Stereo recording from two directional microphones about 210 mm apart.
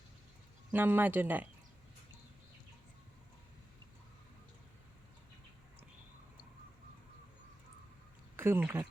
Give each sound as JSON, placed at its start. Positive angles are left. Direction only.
{"t": 0.7, "sound": "speech", "side_deg": -10}
{"t": 8.4, "sound": "speech", "side_deg": -10}